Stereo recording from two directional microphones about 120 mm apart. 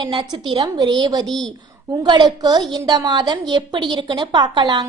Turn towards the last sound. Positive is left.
turn(degrees=-40)  # may be behind; listen again after turning